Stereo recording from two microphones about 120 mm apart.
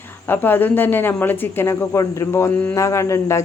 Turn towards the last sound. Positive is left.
turn(degrees=25)  # may be behind; listen again after turning